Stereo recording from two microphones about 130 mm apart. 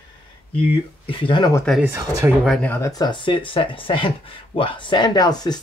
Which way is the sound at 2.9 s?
35° left (ahead or behind).